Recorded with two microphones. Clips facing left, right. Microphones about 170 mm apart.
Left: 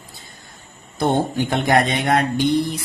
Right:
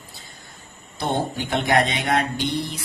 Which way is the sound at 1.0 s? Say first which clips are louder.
Left 5 dB; 50° left (ahead or behind).